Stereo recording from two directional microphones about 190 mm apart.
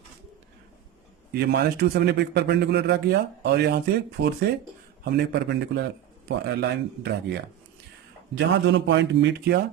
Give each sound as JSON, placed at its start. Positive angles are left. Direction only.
{"t": 1.3, "sound": "a man's voice", "side_deg": -55}
{"t": 8.4, "sound": "a man's voice", "side_deg": -70}